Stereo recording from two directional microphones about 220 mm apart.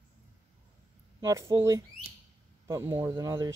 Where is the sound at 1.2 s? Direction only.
15° right (ahead or behind).